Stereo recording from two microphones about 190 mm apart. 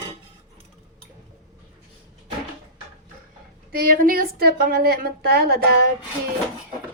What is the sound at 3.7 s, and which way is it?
A woman's voice, 50° right (ahead or behind).